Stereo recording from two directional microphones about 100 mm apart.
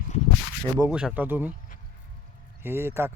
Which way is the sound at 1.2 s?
20° right (ahead or behind).